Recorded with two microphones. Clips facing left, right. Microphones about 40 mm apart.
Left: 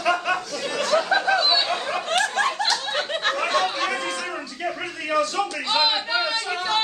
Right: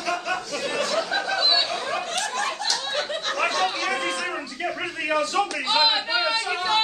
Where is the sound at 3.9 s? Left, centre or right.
Centre.